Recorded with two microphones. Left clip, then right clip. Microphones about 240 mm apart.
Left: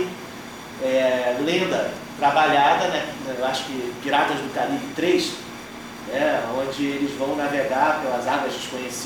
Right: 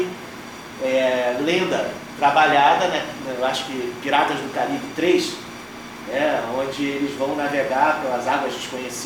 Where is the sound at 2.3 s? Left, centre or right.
Centre.